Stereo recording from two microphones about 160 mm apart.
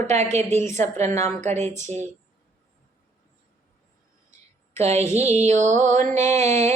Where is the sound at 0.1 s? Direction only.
45° right (ahead or behind).